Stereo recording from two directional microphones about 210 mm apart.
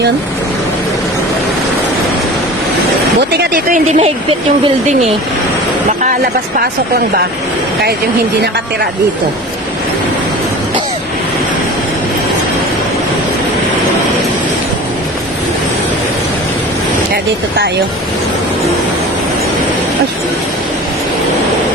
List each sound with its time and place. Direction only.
3.3 s speech: 40° right (ahead or behind)